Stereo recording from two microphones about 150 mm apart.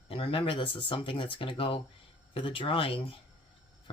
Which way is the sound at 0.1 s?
40° left (ahead or behind).